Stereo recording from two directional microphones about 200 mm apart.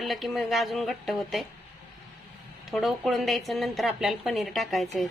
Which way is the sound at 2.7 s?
Centre (ahead or behind).